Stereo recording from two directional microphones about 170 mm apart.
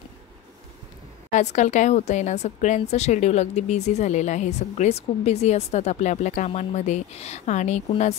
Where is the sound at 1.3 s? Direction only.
45° left (ahead or behind).